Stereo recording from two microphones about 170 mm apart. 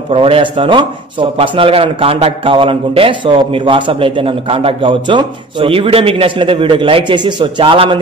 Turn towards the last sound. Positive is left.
turn(degrees=-30)  # may be behind; listen again after turning